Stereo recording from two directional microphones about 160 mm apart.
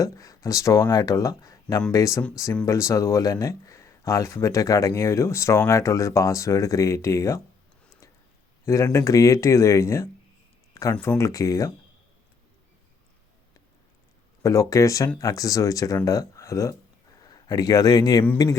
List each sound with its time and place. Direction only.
0.0 s speech: 20° left (ahead or behind)
8.6 s speech: 20° left (ahead or behind)
10.9 s speech: 5° left (ahead or behind)
11.2 s speech: 20° left (ahead or behind)
14.4 s speech: 20° left (ahead or behind)